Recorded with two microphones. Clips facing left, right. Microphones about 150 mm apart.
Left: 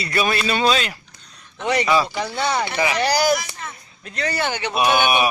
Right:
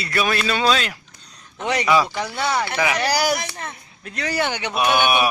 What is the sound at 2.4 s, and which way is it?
Speech, 20° left (ahead or behind).